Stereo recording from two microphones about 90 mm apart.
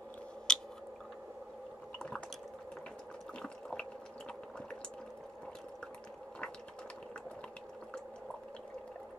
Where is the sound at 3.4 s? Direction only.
5° left (ahead or behind).